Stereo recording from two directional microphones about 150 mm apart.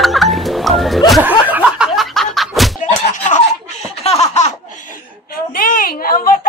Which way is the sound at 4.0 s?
45° left (ahead or behind).